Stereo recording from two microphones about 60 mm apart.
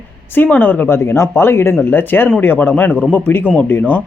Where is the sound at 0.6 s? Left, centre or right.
Left.